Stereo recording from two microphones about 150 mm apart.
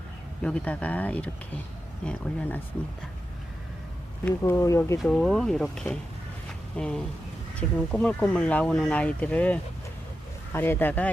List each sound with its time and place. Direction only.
0.4 s speech: 10° left (ahead or behind)
4.3 s speech: 15° left (ahead or behind)
5.0 s speech: 5° left (ahead or behind)